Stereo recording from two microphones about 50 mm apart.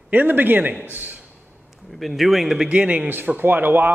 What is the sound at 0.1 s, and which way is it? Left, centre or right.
Speech, right.